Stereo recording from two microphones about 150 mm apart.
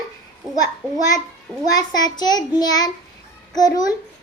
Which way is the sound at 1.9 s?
25° left (ahead or behind).